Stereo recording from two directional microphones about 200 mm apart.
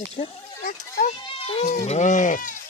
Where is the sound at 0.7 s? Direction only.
40° left (ahead or behind).